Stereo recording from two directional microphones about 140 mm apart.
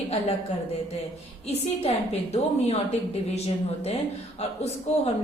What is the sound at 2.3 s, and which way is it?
A woman's voice, 50° left (ahead or behind).